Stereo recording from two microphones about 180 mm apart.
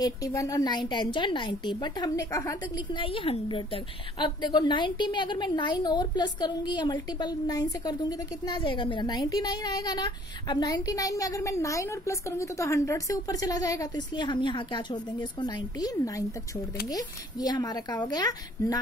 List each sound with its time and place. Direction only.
0.0 s a woman's voice: 20° left (ahead or behind)